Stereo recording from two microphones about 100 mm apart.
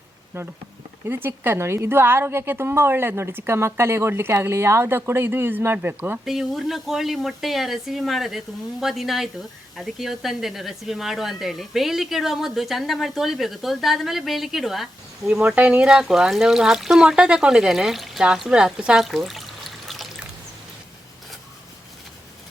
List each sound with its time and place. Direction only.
0.3 s a woman's voice: 25° right (ahead or behind)
6.2 s speech: centre (ahead or behind)
15.3 s speech: 15° right (ahead or behind)